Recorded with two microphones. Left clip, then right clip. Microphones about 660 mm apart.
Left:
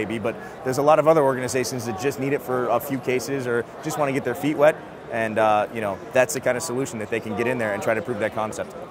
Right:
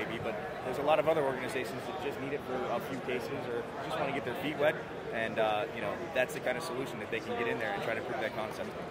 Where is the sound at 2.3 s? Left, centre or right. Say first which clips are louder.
Left 13 dB; left.